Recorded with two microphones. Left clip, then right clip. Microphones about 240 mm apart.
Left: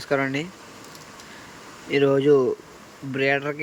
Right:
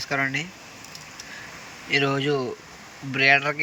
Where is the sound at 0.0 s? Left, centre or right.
Centre.